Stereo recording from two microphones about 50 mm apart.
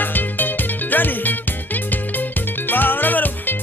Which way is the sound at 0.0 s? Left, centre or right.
Left.